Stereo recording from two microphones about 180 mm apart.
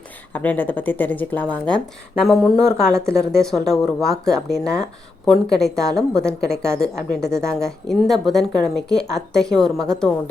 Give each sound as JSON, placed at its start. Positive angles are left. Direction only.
{"t": 0.3, "sound": "a woman's voice", "side_deg": 10}